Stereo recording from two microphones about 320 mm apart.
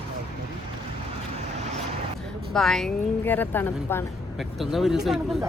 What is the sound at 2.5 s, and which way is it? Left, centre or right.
A woman's voice, centre.